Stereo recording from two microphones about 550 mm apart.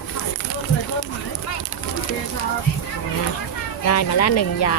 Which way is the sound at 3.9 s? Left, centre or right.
Left.